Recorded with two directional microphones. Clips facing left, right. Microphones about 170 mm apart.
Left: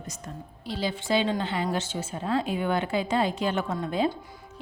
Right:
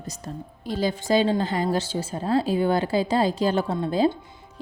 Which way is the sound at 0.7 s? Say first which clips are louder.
Right 4 dB; 45° right (ahead or behind).